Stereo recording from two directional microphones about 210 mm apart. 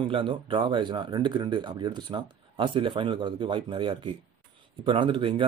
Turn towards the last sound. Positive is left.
turn(degrees=-25)  # may be behind; listen again after turning